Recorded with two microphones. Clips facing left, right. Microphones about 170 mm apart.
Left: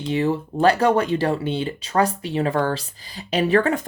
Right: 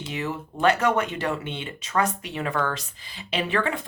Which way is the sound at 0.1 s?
30° left (ahead or behind).